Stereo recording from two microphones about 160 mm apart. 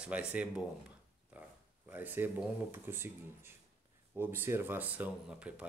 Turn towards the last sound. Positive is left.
turn(degrees=-10)  # may be behind; listen again after turning